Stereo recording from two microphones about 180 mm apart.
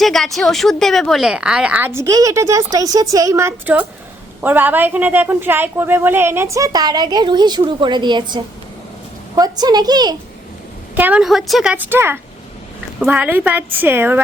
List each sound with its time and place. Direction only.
0.0 s a woman's voice: centre (ahead or behind)
2.0 s a woman's voice: 20° right (ahead or behind)
10.9 s a woman's voice: 10° right (ahead or behind)